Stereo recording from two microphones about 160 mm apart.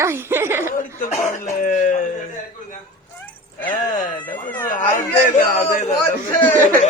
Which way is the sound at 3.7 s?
55° left (ahead or behind).